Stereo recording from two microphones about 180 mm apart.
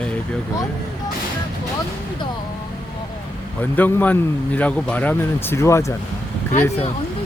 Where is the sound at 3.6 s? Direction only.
10° left (ahead or behind).